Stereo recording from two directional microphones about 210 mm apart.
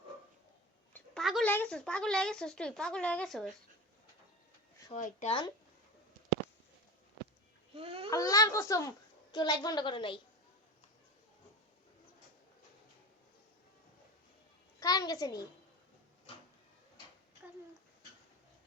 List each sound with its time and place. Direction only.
0.9 s speech: centre (ahead or behind)
4.9 s speech: 35° left (ahead or behind)
7.7 s babbling: 25° right (ahead or behind)
8.1 s a child's voice: 15° left (ahead or behind)
14.8 s a child's voice: 20° left (ahead or behind)